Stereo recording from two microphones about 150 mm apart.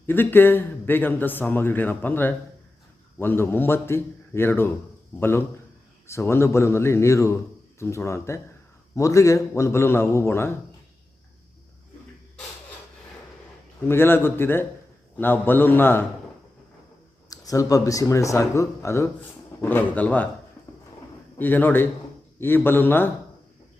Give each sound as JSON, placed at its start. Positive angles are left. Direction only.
{"t": 0.0, "sound": "speech", "side_deg": 15}
{"t": 13.8, "sound": "speech", "side_deg": 15}
{"t": 17.2, "sound": "speech", "side_deg": 25}
{"t": 21.3, "sound": "speech", "side_deg": 15}